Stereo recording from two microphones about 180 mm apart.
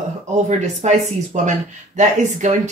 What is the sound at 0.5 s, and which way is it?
Speech, 40° right (ahead or behind).